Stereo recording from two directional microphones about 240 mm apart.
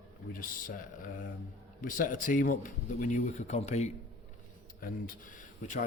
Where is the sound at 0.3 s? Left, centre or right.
Left.